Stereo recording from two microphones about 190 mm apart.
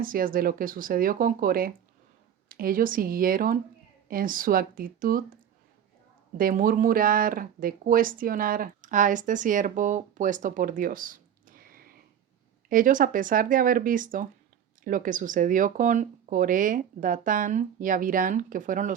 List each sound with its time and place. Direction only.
0.0 s speech: 50° right (ahead or behind)
6.3 s speech: 45° right (ahead or behind)